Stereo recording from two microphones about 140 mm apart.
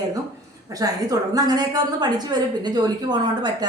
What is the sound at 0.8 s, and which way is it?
A woman's voice, 25° right (ahead or behind).